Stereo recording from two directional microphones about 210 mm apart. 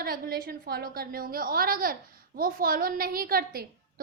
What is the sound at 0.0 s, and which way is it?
A woman's voice, 45° right (ahead or behind).